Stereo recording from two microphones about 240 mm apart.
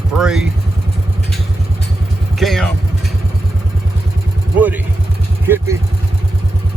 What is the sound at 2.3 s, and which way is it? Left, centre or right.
Vehicle, centre.